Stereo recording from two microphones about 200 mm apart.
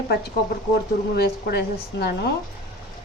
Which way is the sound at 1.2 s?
50° left (ahead or behind).